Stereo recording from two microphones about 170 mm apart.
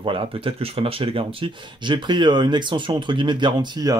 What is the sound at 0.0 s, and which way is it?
Speech, 30° right (ahead or behind).